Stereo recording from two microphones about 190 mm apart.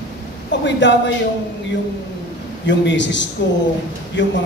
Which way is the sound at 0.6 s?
70° left (ahead or behind).